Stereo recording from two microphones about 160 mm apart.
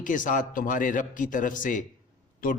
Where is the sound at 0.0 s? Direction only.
55° left (ahead or behind).